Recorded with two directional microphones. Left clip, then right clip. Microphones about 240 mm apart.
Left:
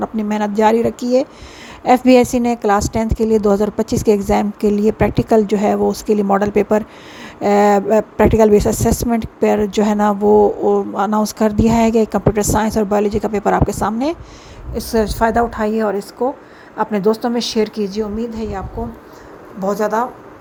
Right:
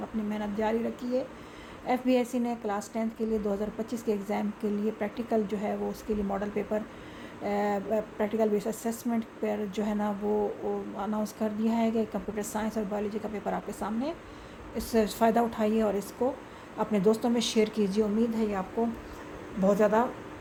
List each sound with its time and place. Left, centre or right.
0.0 s a woman's voice: left; by 18.6 s centre
19.6 s a woman's voice: centre